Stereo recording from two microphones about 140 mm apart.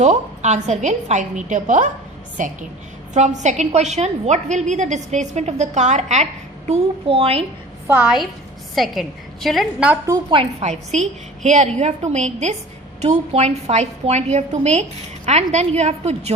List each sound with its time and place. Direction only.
0.0 s a woman's voice: 55° right (ahead or behind)
6.7 s a woman's voice: 45° right (ahead or behind)
7.9 s a woman's voice: 10° right (ahead or behind)
10.1 s a woman's voice: 35° right (ahead or behind)
10.6 s a woman's voice: 55° right (ahead or behind)